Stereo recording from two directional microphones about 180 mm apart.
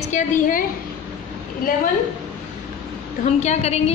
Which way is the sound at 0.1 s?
50° left (ahead or behind).